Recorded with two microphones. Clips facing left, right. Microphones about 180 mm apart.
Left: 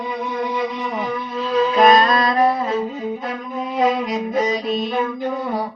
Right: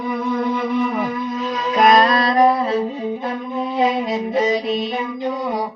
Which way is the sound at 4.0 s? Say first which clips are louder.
Right 1 dB; 25° right (ahead or behind).